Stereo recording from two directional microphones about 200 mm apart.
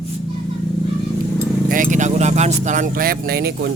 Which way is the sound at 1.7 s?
40° right (ahead or behind).